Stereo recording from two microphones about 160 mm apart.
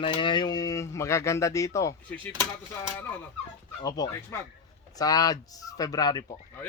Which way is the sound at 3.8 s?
20° left (ahead or behind).